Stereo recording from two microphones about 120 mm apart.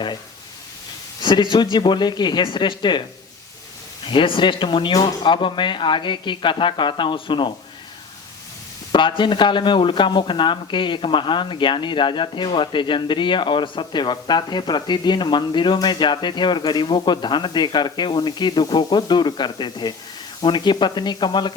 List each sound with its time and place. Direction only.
1.2 s speech: 40° left (ahead or behind)
4.0 s speech: 45° left (ahead or behind)
8.9 s speech: 45° left (ahead or behind)